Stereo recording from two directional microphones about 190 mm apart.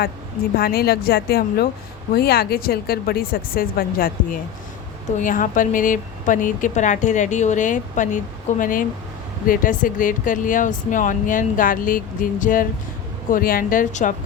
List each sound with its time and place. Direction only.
0.5 s a woman's voice: 55° left (ahead or behind)